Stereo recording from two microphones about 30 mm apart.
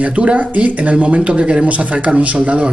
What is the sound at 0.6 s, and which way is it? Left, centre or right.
Speech, right.